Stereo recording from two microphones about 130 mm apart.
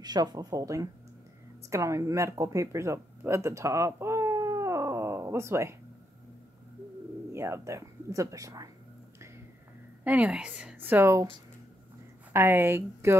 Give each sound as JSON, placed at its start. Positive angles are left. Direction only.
{"t": 0.0, "sound": "speech", "side_deg": -30}
{"t": 7.3, "sound": "speech", "side_deg": -20}
{"t": 10.0, "sound": "a woman's voice", "side_deg": -10}
{"t": 12.3, "sound": "a woman's voice", "side_deg": -20}